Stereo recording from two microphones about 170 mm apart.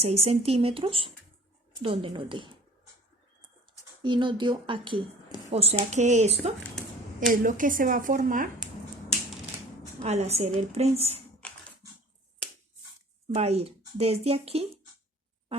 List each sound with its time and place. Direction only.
0.0 s speech: 35° right (ahead or behind)
4.0 s speech: 30° right (ahead or behind)
7.3 s speech: 50° right (ahead or behind)
10.0 s speech: 40° right (ahead or behind)
13.2 s speech: 40° right (ahead or behind)